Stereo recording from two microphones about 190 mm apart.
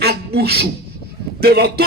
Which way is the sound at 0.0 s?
55° right (ahead or behind).